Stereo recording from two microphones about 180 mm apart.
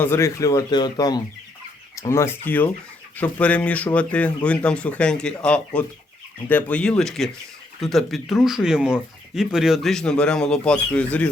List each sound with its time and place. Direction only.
0.0 s speech: 15° left (ahead or behind)